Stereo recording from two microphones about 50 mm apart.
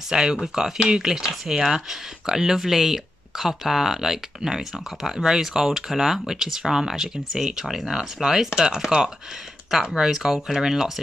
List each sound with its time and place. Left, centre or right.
0.1 s speech: centre